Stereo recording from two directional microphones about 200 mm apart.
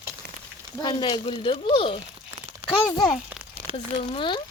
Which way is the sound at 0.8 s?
20° left (ahead or behind).